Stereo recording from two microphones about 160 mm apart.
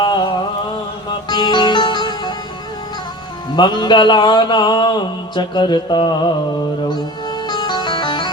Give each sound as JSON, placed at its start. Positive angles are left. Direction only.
{"t": 0.0, "sound": "a sound", "side_deg": 30}
{"t": 1.3, "sound": "music", "side_deg": 25}
{"t": 3.5, "sound": "mantra", "side_deg": 30}
{"t": 6.8, "sound": "music", "side_deg": 25}